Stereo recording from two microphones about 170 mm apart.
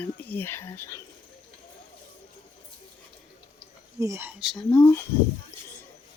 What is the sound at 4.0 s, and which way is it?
Speech, 15° right (ahead or behind).